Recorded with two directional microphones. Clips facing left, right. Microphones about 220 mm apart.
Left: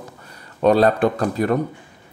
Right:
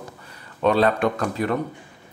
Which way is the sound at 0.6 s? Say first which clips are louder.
Left 4 dB; 40° left (ahead or behind).